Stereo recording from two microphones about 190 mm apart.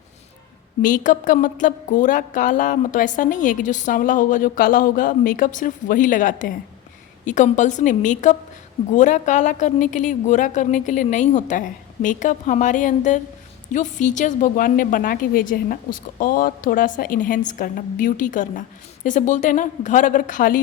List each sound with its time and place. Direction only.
0.8 s a woman's voice: 45° left (ahead or behind)